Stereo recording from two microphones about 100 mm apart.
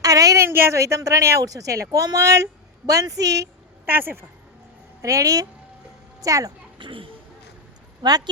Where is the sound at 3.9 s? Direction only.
20° right (ahead or behind).